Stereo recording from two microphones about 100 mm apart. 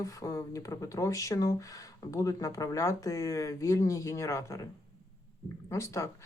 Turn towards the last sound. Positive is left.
turn(degrees=30)  # may be behind; listen again after turning